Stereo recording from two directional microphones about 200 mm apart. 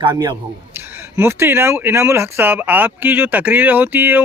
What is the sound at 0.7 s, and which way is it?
Speech, 10° right (ahead or behind).